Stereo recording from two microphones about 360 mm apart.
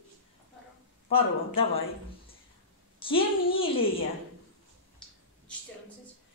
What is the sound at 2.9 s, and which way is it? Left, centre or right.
Speech, centre.